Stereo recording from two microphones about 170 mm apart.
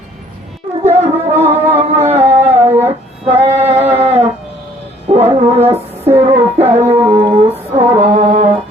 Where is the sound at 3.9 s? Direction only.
35° right (ahead or behind).